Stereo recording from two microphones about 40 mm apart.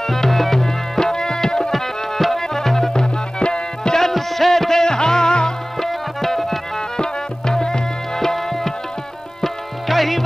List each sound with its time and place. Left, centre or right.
0.0 s music: centre
1.7 s music: centre
2.9 s tabla: left
3.9 s music: centre
5.8 s tabla: centre
7.0 s tabla: centre
9.4 s music: centre